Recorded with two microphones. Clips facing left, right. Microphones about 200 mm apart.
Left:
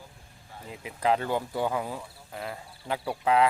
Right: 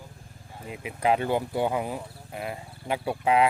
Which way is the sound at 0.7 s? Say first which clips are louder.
Right 2 dB; 15° right (ahead or behind).